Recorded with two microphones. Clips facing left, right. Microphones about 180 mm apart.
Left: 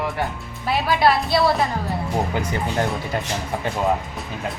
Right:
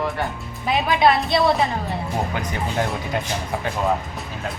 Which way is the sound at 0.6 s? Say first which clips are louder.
Right 1 dB; 15° right (ahead or behind).